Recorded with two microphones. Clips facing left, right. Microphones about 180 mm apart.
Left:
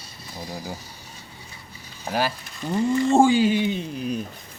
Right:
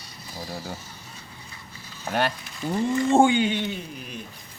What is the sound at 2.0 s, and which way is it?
Speech, 5° left (ahead or behind).